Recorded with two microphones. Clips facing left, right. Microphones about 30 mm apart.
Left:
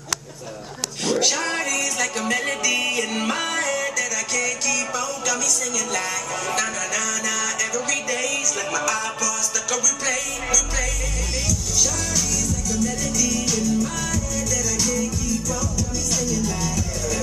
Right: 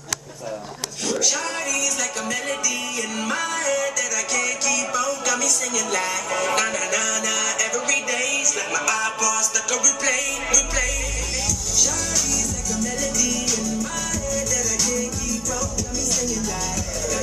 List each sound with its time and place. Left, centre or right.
1.0 s music: left
2.6 s music: left
3.2 s music: centre
6.3 s speech: centre
7.2 s music: centre
12.7 s music: centre